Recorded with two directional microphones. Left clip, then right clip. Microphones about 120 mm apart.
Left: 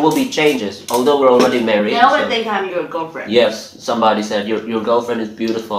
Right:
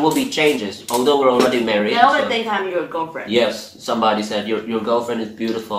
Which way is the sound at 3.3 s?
20° right (ahead or behind).